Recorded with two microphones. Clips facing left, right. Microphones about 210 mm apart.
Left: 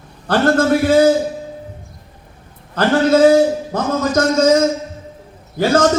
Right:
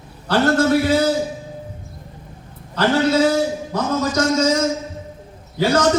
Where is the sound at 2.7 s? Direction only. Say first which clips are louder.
Left 3 dB; 50° left (ahead or behind).